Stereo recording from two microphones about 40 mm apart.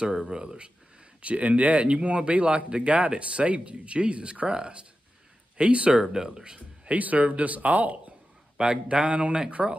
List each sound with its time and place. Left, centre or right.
0.1 s speech: centre
1.2 s speech: right
6.1 s speech: centre
6.9 s speech: right
8.5 s speech: right